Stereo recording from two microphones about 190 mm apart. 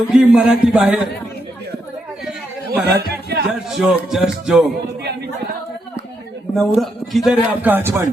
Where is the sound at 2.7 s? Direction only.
55° right (ahead or behind).